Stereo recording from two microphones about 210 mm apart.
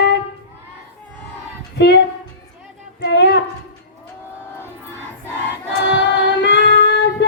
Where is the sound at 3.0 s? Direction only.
50° left (ahead or behind).